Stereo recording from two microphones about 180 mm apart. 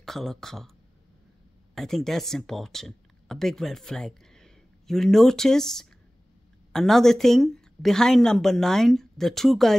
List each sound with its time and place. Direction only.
0.0 s speech: centre (ahead or behind)
1.8 s speech: centre (ahead or behind)